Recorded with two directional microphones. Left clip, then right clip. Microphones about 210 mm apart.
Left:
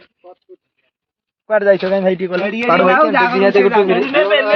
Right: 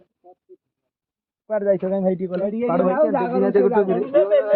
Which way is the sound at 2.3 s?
15° left (ahead or behind).